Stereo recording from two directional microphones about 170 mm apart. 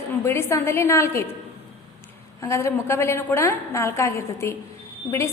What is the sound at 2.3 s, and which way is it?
A woman's voice, 15° left (ahead or behind).